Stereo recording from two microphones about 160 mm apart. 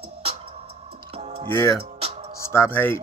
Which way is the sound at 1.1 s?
40° right (ahead or behind).